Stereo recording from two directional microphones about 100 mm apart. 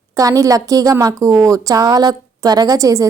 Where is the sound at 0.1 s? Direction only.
35° right (ahead or behind).